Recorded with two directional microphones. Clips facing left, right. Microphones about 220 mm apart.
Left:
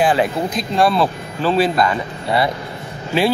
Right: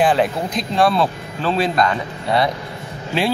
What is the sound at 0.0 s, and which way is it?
Speech, centre (ahead or behind).